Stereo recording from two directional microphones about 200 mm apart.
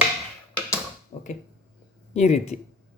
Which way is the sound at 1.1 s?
30° left (ahead or behind).